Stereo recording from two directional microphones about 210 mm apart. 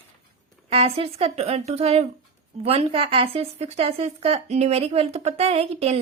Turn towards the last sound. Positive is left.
turn(degrees=-30)  # may be behind; listen again after turning